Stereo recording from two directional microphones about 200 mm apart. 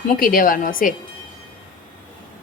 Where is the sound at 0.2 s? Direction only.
45° left (ahead or behind).